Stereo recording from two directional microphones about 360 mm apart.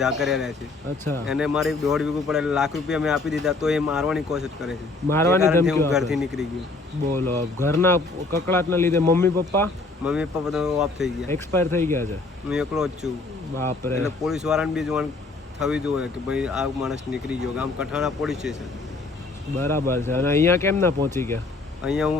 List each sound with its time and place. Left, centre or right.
0.0 s speech: centre
7.6 s speech: centre
19.5 s speech: centre